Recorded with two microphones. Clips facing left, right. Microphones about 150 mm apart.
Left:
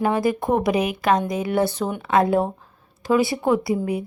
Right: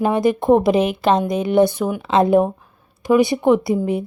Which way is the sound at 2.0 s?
20° right (ahead or behind).